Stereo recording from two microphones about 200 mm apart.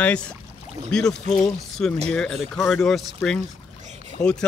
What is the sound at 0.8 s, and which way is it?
Speech, 5° left (ahead or behind).